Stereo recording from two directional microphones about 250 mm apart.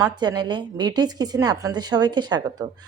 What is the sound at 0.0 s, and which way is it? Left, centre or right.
A woman's voice, centre.